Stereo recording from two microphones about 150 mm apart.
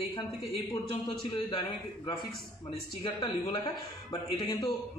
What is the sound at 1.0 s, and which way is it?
A man's voice, 30° left (ahead or behind).